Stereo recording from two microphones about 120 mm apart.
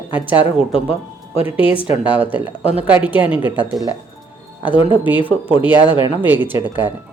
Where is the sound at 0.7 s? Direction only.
55° left (ahead or behind).